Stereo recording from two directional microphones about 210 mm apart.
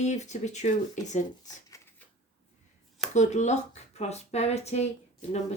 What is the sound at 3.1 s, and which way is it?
Speech, 35° left (ahead or behind).